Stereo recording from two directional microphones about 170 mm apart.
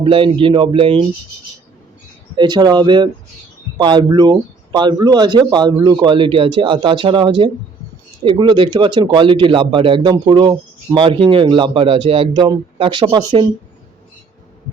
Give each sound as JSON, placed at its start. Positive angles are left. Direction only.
{"t": 0.0, "sound": "a man's voice", "side_deg": -30}
{"t": 2.3, "sound": "a man's voice", "side_deg": -25}